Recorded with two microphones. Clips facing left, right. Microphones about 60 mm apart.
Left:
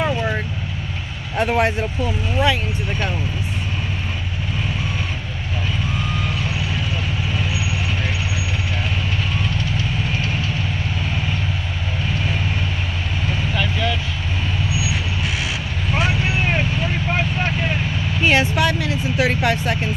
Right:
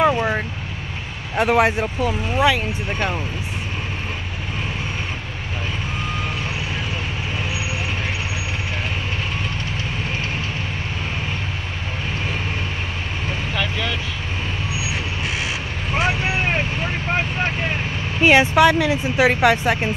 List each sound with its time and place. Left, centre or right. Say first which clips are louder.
0.0 s vehicle: right 4 dB; centre
1.3 s speech: right 2 dB; centre
15.9 s vehicle: even; right
18.2 s speech: right 4 dB; right